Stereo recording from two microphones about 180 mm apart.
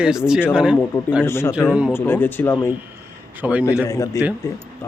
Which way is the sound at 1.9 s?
10° left (ahead or behind).